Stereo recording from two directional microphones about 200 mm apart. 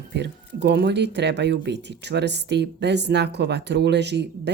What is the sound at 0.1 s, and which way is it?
Speech, 60° right (ahead or behind).